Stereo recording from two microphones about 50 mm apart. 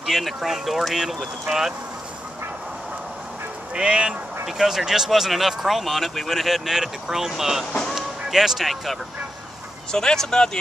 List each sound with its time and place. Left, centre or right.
0.0 s speech: centre
3.7 s speech: centre
4.6 s speech: centre
7.9 s music: centre
9.9 s speech: centre